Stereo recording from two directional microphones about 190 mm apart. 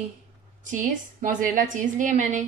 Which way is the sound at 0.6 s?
40° right (ahead or behind).